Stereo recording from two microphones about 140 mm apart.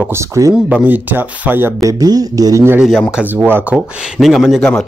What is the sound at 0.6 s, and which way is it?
Speech, 10° right (ahead or behind).